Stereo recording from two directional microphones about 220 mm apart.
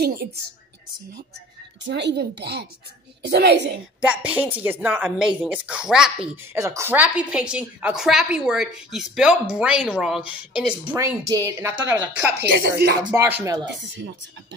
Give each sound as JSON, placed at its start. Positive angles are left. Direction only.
{"t": 1.9, "sound": "a child's voice", "side_deg": -50}
{"t": 4.0, "sound": "speech", "side_deg": -5}